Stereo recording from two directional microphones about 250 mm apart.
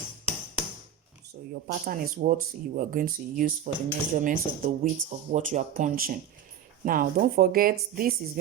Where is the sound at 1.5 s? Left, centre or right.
Right.